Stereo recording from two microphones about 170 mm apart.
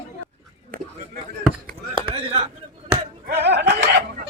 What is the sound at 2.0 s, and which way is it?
Chop, 30° right (ahead or behind).